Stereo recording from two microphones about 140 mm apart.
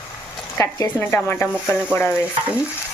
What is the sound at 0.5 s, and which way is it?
Speech, 20° left (ahead or behind).